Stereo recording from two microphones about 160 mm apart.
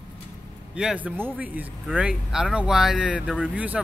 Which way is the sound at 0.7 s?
5° right (ahead or behind).